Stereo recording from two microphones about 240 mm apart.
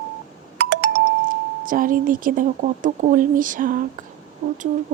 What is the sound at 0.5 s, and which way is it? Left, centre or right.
Speech, right.